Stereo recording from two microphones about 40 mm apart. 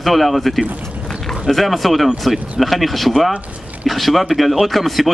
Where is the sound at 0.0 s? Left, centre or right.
Centre.